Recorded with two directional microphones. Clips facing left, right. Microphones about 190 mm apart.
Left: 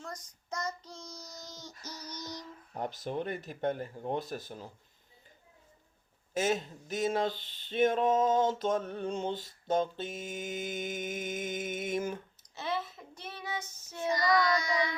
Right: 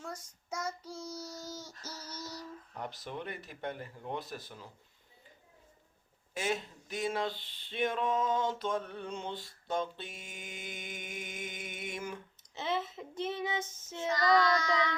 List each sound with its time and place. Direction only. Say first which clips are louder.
0.0 s child singing: even; 10° right (ahead or behind)
2.0 s female singing: left 3 dB; 5° right (ahead or behind)
2.7 s speech: left 7 dB; 45° left (ahead or behind)
6.3 s speech: left 5 dB; 45° left (ahead or behind)
12.5 s child singing: right 1 dB; 20° right (ahead or behind)
14.1 s child singing: even; 10° left (ahead or behind)